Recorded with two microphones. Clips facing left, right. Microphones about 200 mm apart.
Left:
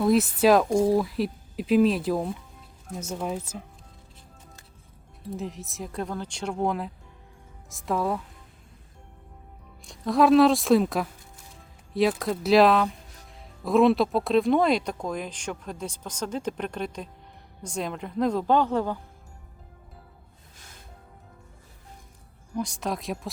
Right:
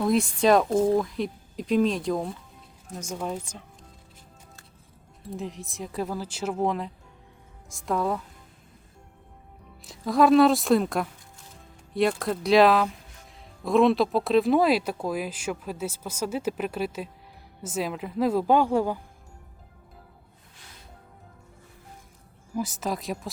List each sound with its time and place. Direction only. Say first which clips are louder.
0.0 s speech: left 2 dB; 5° left (ahead or behind)
5.3 s speech: left 1 dB; centre (ahead or behind)
9.8 s speech: even; centre (ahead or behind)
20.6 s music: even; 45° left (ahead or behind)
22.5 s speech: even; 5° right (ahead or behind)